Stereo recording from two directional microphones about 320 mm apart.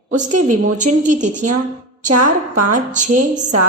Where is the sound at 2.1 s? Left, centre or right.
Right.